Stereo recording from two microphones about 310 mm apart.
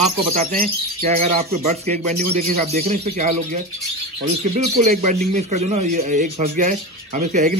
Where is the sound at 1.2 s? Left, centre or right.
Right.